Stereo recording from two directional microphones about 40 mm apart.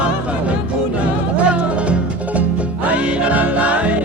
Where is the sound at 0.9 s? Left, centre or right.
Right.